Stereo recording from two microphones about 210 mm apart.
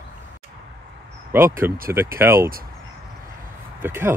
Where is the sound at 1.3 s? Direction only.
10° right (ahead or behind).